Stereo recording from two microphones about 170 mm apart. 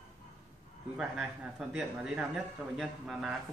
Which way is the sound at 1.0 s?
5° right (ahead or behind).